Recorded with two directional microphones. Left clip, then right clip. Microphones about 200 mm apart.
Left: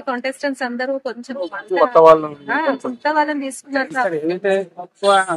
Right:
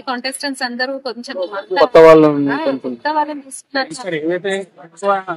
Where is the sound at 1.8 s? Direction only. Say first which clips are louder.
Right 4 dB; 40° right (ahead or behind).